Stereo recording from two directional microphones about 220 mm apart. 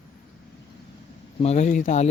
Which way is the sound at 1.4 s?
30° left (ahead or behind).